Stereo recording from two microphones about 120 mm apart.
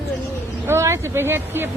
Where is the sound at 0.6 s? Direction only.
20° right (ahead or behind).